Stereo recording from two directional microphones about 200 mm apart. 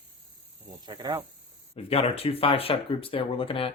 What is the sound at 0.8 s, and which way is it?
Speech, 20° right (ahead or behind).